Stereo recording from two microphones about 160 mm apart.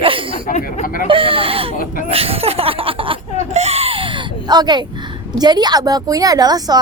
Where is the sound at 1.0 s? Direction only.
35° right (ahead or behind).